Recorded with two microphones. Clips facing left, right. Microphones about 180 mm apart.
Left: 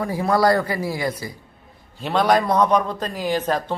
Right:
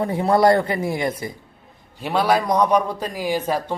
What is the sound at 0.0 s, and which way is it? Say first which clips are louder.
Speech: right 2 dB; 25° right (ahead or behind).